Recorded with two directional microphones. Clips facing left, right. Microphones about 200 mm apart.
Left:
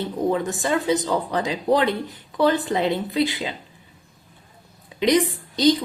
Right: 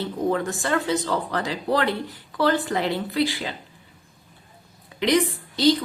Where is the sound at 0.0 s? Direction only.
20° left (ahead or behind).